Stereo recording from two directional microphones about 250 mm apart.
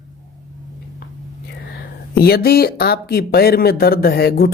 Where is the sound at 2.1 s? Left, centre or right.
Left.